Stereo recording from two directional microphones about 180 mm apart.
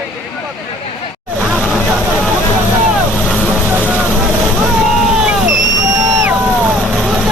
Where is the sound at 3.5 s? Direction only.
10° right (ahead or behind).